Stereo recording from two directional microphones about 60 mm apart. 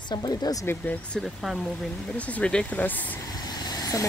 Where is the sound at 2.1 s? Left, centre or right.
Left.